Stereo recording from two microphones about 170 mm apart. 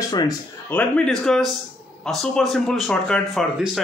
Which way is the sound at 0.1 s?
25° left (ahead or behind).